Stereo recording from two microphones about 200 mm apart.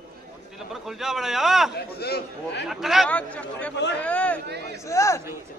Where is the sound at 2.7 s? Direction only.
Centre (ahead or behind); by 5.2 s 15° left (ahead or behind).